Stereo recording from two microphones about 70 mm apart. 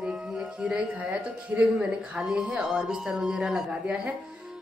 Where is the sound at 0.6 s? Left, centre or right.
Centre.